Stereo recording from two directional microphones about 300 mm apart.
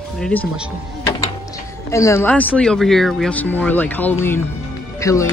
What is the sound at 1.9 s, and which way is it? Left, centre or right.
Speech, centre.